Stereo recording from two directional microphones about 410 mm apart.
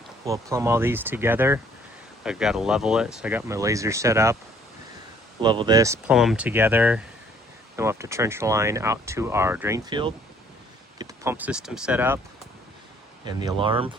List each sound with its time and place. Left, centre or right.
0.3 s speech: centre
5.4 s speech: centre
13.2 s speech: centre